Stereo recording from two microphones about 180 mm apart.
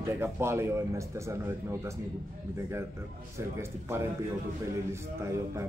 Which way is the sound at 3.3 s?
15° right (ahead or behind).